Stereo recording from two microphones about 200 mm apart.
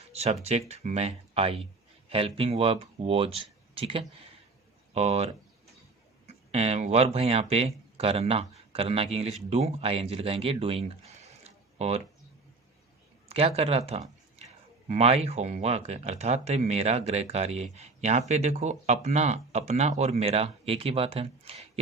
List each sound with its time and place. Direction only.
0.1 s speech: 30° right (ahead or behind)
13.2 s a sound: 30° right (ahead or behind)
13.6 s speech: 30° right (ahead or behind)